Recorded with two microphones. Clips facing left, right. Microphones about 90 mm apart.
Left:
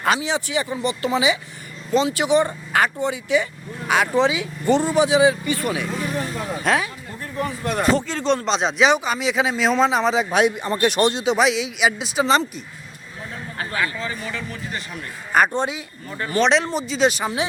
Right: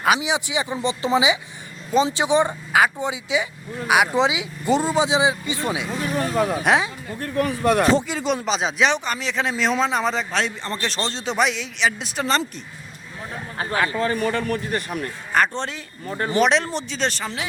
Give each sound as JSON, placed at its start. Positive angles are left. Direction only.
{"t": 0.2, "sound": "speech", "side_deg": -15}
{"t": 6.1, "sound": "vehicle", "side_deg": -90}
{"t": 6.6, "sound": "speech", "side_deg": -20}
{"t": 7.2, "sound": "speech", "side_deg": -70}
{"t": 7.9, "sound": "speech", "side_deg": -10}
{"t": 13.7, "sound": "a man's voice", "side_deg": -40}
{"t": 15.3, "sound": "speech", "side_deg": 10}
{"t": 16.0, "sound": "speech", "side_deg": -35}
{"t": 16.4, "sound": "speech", "side_deg": 0}